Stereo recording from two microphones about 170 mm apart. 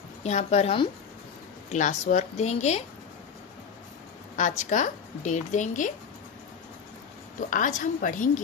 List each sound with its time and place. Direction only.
0.2 s a woman's voice: 40° left (ahead or behind)
4.4 s a woman's voice: 45° left (ahead or behind)
7.3 s a woman's voice: 50° left (ahead or behind)